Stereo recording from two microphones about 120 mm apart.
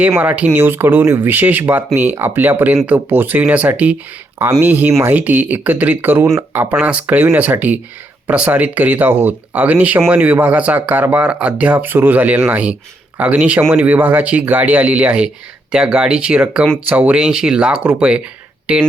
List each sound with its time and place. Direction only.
0.2 s speech: 10° right (ahead or behind)